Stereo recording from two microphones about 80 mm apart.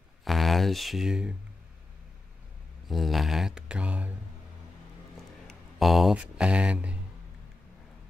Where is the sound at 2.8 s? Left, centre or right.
Centre.